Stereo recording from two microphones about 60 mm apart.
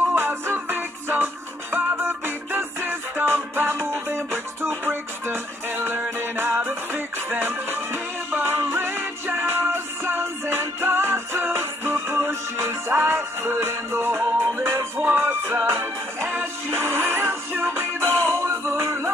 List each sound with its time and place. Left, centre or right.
0.1 s music: right
12.9 s music: right